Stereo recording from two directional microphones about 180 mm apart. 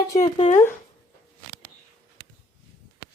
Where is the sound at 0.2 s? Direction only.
40° left (ahead or behind).